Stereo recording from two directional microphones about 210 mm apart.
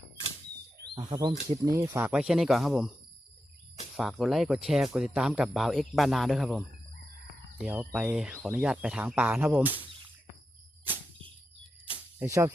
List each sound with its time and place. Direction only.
1.1 s speech: 20° right (ahead or behind); by 2.9 s centre (ahead or behind)
3.9 s speech: centre (ahead or behind)
12.2 s speech: 15° right (ahead or behind)